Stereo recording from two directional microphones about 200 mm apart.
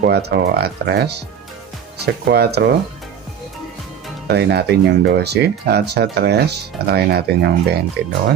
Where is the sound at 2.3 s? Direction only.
55° right (ahead or behind).